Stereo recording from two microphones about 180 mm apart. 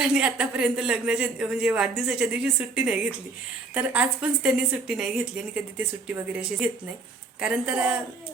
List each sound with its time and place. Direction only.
0.0 s speech: 5° right (ahead or behind)